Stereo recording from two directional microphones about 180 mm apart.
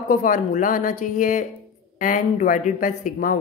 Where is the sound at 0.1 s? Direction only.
50° left (ahead or behind).